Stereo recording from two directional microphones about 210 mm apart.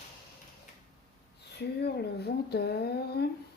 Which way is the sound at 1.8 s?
50° left (ahead or behind).